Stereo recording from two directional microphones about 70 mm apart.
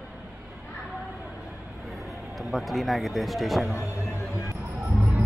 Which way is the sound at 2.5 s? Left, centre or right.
Centre.